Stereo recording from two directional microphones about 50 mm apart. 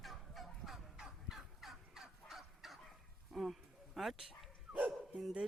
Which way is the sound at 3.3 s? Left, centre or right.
Centre.